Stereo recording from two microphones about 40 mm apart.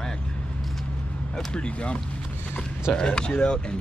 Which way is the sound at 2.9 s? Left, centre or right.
Left.